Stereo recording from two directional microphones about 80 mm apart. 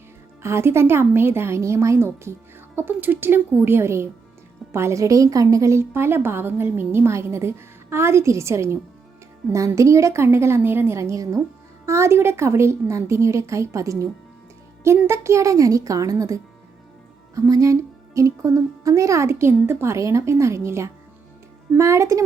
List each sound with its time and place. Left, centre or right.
0.4 s a woman's voice: right